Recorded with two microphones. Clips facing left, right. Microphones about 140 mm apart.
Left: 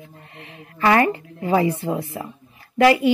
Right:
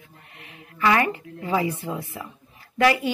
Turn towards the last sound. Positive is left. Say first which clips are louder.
# left 5 dB
turn(degrees=25)  # may be behind; listen again after turning